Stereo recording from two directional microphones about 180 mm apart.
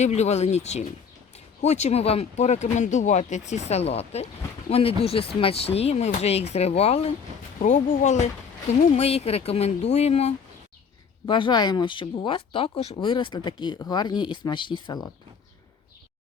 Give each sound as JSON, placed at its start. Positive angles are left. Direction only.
{"t": 0.0, "sound": "speech", "side_deg": 40}